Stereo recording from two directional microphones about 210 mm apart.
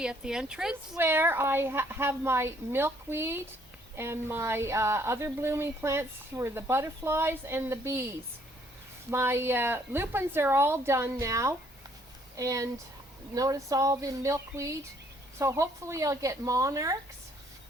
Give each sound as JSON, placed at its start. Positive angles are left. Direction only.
{"t": 0.0, "sound": "a woman's voice", "side_deg": -5}
{"t": 9.0, "sound": "a woman's voice", "side_deg": -10}